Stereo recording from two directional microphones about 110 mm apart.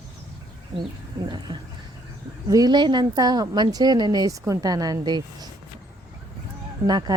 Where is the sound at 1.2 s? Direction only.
45° right (ahead or behind).